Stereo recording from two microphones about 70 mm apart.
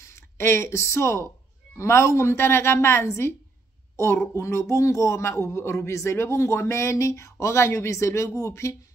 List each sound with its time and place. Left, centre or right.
0.0 s speech: left